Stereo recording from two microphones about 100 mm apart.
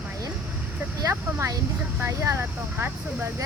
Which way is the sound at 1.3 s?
30° right (ahead or behind).